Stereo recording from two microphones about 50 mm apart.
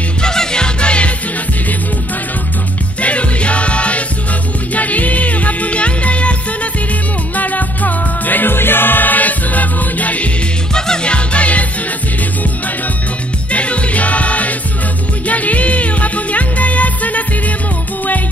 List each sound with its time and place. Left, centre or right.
0.2 s music: centre
3.0 s music: left
10.7 s music: centre
13.5 s music: left